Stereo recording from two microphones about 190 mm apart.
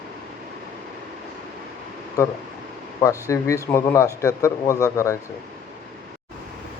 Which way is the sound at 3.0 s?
15° left (ahead or behind).